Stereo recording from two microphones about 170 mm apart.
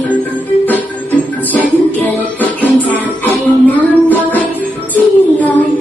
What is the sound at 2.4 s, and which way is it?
Music, 10° left (ahead or behind).